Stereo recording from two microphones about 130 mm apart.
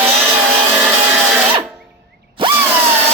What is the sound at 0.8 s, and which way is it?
Vehicle, 10° right (ahead or behind).